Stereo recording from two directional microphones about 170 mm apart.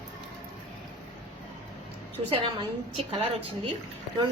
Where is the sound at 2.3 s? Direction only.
30° right (ahead or behind).